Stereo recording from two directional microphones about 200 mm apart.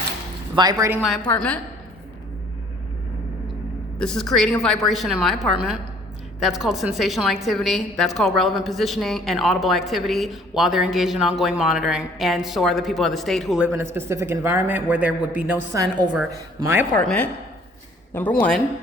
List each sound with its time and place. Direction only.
0.5 s speech: 20° right (ahead or behind)
1.3 s speech: 5° left (ahead or behind)
3.9 s a woman's voice: 5° left (ahead or behind)
13.9 s a woman's voice: 15° right (ahead or behind)
16.9 s speech: 10° left (ahead or behind)